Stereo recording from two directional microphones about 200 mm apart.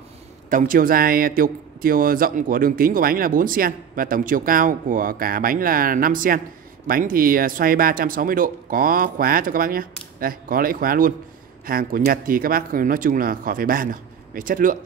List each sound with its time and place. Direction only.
0.5 s a man's voice: 40° right (ahead or behind)